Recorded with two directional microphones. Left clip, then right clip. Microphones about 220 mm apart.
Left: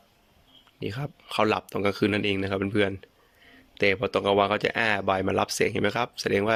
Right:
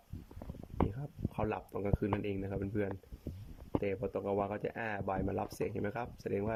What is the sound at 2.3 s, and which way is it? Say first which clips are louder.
Speech: left 13 dB; 15° left (ahead or behind).